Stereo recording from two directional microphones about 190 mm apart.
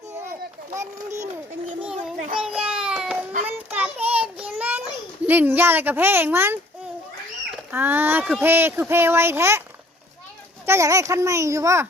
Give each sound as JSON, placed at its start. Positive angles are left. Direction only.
{"t": 0.8, "sound": "speech", "side_deg": -15}
{"t": 2.4, "sound": "child singing", "side_deg": -5}
{"t": 5.2, "sound": "speech", "side_deg": -10}
{"t": 10.7, "sound": "speech", "side_deg": -15}